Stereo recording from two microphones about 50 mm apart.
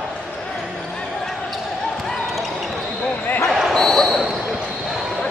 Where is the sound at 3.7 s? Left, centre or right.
Centre.